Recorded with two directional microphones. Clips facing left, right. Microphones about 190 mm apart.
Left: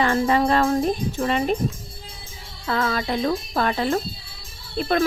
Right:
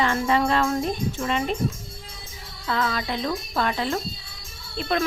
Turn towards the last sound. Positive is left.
turn(degrees=45)  # may be behind; listen again after turning